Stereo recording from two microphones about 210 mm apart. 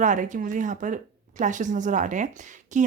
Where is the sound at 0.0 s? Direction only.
35° right (ahead or behind).